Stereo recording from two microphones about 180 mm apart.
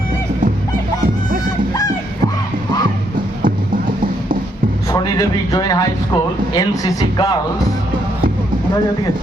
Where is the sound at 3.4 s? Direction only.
50° right (ahead or behind).